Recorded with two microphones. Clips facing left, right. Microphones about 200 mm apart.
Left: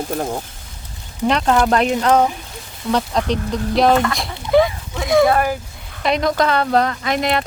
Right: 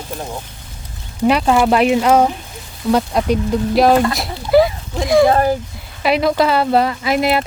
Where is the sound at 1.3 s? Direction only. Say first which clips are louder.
Right 2 dB; 10° right (ahead or behind).